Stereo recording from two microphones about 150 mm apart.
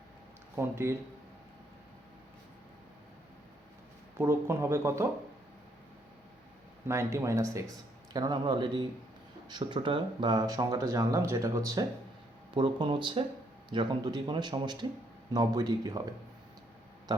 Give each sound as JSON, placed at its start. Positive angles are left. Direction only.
{"t": 0.5, "sound": "speech", "side_deg": -15}
{"t": 4.2, "sound": "speech", "side_deg": -15}
{"t": 6.8, "sound": "speech", "side_deg": -20}